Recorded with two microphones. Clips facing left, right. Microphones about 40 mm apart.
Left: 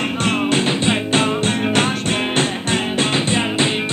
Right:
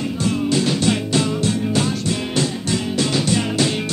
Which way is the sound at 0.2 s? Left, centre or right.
Left.